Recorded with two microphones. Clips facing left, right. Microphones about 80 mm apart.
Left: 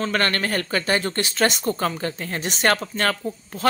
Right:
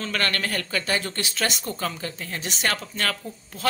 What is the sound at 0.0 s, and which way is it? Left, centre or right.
A woman's voice, left.